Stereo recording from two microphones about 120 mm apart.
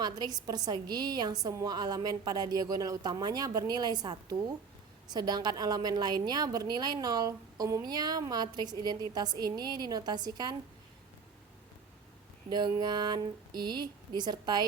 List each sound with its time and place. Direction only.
0.0 s a woman's voice: 35° right (ahead or behind)
12.5 s a woman's voice: 35° right (ahead or behind)